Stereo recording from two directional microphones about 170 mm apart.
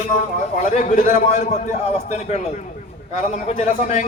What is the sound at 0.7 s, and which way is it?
Speech, 50° left (ahead or behind).